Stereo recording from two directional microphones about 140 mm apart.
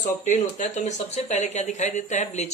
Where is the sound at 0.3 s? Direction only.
60° left (ahead or behind).